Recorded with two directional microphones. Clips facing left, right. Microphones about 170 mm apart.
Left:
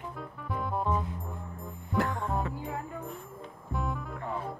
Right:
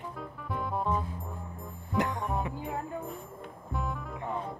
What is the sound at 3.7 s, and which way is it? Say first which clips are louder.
Music: left 1 dB; centre (ahead or behind).